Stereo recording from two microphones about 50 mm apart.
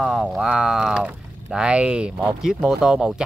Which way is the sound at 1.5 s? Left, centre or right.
Right.